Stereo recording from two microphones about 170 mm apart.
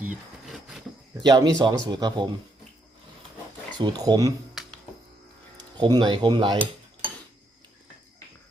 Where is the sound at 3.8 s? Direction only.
25° right (ahead or behind).